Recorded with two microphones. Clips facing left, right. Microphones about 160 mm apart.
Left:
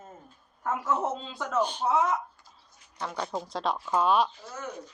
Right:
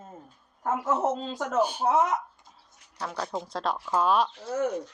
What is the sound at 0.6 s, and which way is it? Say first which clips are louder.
Speech: right 2 dB; 30° right (ahead or behind).